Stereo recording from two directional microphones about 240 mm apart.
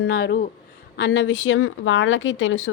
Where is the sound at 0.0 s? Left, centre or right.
Left.